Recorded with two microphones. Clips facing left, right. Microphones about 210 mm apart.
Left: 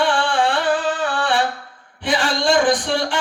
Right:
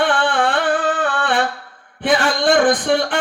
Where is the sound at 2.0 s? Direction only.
55° right (ahead or behind).